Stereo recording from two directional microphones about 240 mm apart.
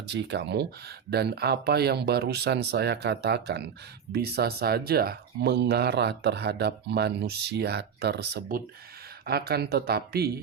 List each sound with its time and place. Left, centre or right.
0.1 s speech: right